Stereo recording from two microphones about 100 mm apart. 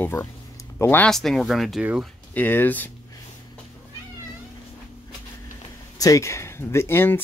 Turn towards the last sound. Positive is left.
turn(degrees=20)  # may be behind; listen again after turning